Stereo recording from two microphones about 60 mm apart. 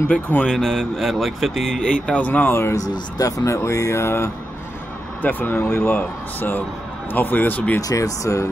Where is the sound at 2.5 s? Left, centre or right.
Left.